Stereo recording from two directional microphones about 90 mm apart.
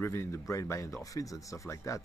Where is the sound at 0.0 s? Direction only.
30° left (ahead or behind).